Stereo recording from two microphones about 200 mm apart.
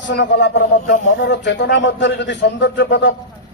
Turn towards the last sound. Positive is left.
turn(degrees=60)  # may be behind; listen again after turning